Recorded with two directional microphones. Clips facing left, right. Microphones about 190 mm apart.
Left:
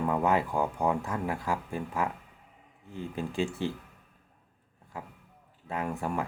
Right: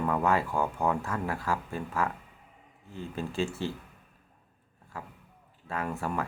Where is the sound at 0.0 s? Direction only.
15° left (ahead or behind).